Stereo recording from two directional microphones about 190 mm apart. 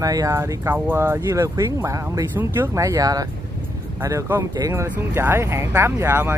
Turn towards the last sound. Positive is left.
turn(degrees=-10)  # may be behind; listen again after turning